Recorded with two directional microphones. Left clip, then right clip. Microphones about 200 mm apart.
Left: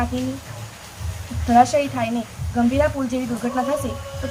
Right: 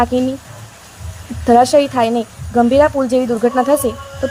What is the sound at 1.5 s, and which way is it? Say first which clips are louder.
Speech: right 6 dB; 45° right (ahead or behind).